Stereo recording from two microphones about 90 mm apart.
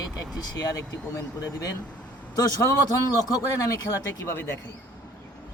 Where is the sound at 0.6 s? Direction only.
40° left (ahead or behind).